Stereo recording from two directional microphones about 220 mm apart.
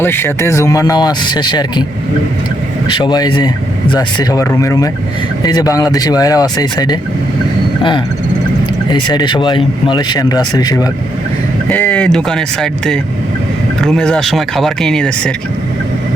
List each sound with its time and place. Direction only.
0.0 s speech: 10° left (ahead or behind)
3.0 s speech: 20° left (ahead or behind)
11.7 s speech: 5° left (ahead or behind)